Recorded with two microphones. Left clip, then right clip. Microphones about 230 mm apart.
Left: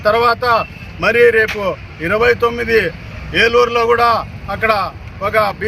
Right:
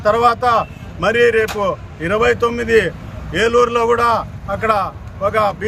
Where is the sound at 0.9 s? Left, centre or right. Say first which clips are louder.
Left 3 dB; centre.